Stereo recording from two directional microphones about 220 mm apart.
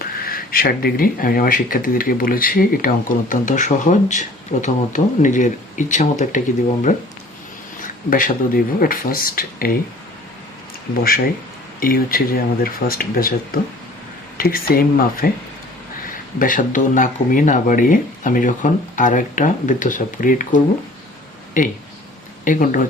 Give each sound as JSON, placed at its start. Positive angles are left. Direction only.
{"t": 0.0, "sound": "speech", "side_deg": 40}
{"t": 7.8, "sound": "speech", "side_deg": 40}
{"t": 11.8, "sound": "speech", "side_deg": 40}